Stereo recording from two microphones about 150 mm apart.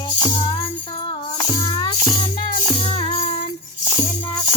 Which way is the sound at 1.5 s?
25° left (ahead or behind).